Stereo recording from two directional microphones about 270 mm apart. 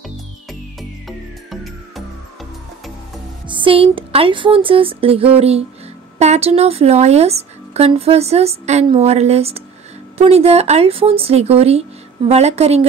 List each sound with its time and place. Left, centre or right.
0.5 s music: centre
3.4 s a woman's voice: centre